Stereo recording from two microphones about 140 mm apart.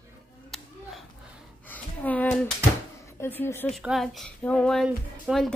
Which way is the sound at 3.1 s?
15° left (ahead or behind).